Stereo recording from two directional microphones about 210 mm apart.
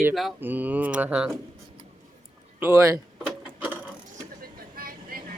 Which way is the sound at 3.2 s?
5° right (ahead or behind).